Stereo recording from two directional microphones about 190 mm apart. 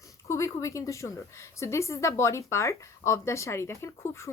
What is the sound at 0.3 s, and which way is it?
Speech, 15° left (ahead or behind).